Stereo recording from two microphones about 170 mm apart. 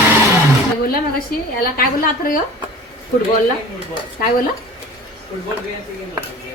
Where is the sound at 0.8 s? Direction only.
60° left (ahead or behind).